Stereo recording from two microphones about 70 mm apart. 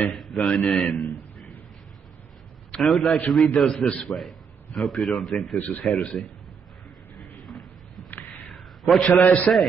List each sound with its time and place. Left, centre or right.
0.1 s a man's voice: centre
2.8 s a man's voice: centre
5.6 s speech: left
6.2 s a man's voice: centre
7.3 s a sound: centre
9.5 s a man's voice: centre